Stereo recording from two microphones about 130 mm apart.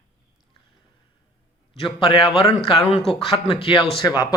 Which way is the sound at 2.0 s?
40° left (ahead or behind).